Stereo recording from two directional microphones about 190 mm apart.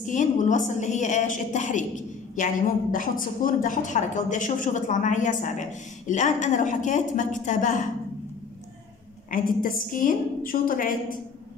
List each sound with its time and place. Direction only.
0.0 s a woman's voice: 40° left (ahead or behind)
9.3 s a woman's voice: 45° left (ahead or behind)